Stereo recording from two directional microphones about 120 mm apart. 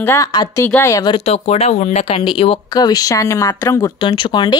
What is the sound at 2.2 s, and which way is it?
Speech, 45° left (ahead or behind).